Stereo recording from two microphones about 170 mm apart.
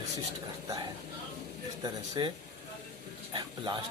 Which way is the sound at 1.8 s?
25° right (ahead or behind).